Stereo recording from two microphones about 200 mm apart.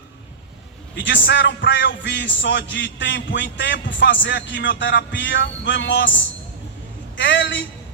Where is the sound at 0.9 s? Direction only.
65° left (ahead or behind).